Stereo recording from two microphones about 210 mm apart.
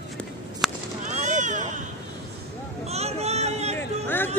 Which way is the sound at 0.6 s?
Centre (ahead or behind).